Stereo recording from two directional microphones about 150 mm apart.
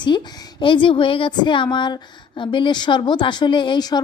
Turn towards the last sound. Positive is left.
turn(degrees=30)  # may be behind; listen again after turning